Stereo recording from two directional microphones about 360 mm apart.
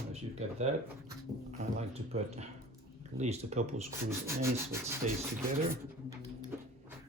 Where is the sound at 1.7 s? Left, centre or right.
Centre.